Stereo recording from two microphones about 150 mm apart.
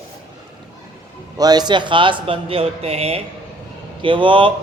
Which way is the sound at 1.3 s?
25° right (ahead or behind).